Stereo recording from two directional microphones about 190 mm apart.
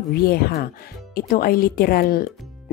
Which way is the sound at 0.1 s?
55° left (ahead or behind).